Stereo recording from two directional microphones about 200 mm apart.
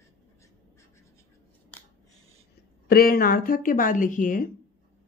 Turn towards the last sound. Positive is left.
turn(degrees=40)  # may be behind; listen again after turning